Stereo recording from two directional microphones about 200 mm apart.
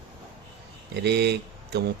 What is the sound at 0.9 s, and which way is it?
Speech, 55° right (ahead or behind).